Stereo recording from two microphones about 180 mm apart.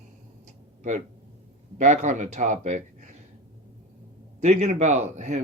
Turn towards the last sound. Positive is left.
turn(degrees=-40)  # may be behind; listen again after turning